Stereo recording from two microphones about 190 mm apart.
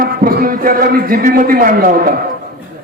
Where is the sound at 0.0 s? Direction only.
50° right (ahead or behind).